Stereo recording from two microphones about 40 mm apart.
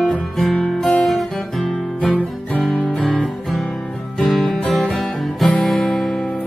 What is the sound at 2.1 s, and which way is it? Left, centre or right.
Music, left.